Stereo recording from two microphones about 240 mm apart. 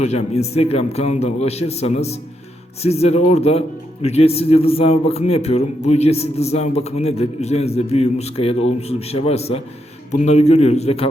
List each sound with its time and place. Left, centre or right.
0.0 s a man's voice: left